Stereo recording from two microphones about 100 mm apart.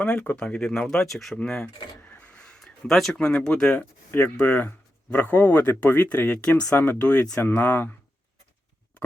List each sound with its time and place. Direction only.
0.0 s speech: 15° left (ahead or behind)
2.1 s a sound: 15° left (ahead or behind)
4.4 s speech: 15° left (ahead or behind)